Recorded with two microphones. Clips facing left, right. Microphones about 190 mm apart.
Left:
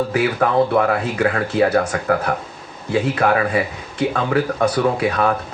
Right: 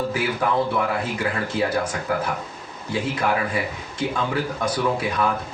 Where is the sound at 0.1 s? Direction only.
65° left (ahead or behind).